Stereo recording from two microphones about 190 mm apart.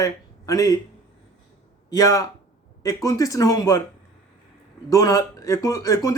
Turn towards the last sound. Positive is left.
turn(degrees=20)  # may be behind; listen again after turning